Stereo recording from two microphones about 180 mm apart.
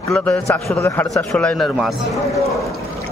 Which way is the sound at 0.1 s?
5° left (ahead or behind).